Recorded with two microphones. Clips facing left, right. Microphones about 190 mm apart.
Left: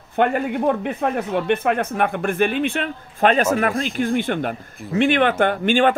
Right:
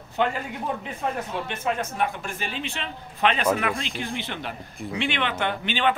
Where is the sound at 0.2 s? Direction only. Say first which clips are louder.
Left 8 dB; 60° left (ahead or behind).